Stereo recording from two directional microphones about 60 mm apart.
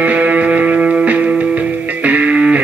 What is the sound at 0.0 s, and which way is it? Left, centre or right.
Music, right.